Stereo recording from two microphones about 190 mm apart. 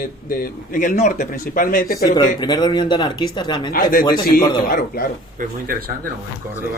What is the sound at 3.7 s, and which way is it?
Speech, 50° left (ahead or behind).